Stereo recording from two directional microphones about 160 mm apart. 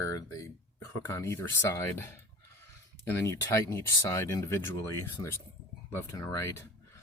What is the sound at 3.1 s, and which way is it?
Speech, 15° left (ahead or behind).